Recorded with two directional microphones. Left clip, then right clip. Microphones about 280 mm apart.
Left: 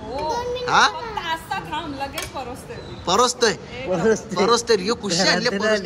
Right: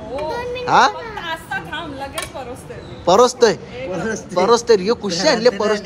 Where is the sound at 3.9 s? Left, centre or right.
Left.